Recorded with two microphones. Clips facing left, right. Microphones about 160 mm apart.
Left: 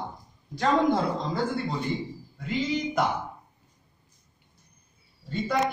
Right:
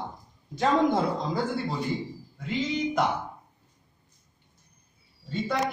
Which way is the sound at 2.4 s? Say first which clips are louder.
Even; centre (ahead or behind).